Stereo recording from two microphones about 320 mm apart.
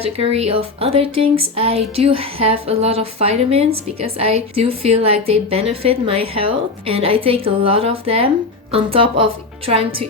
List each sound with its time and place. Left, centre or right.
0.0 s a woman's voice: centre